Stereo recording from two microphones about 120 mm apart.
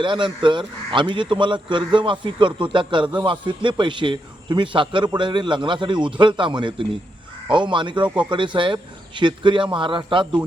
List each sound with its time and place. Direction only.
0.0 s a man's voice: 40° right (ahead or behind)